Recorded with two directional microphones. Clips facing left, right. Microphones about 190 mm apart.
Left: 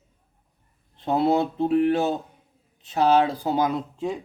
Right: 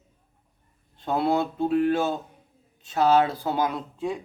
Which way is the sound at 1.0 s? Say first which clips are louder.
Left 3 dB; 20° left (ahead or behind).